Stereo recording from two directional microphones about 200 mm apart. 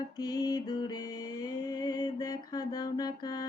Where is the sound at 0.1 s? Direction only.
20° left (ahead or behind).